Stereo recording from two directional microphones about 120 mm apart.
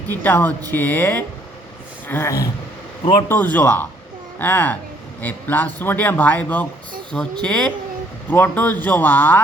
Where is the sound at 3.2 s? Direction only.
15° left (ahead or behind).